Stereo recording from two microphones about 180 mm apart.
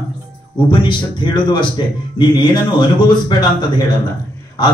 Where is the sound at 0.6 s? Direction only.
25° left (ahead or behind).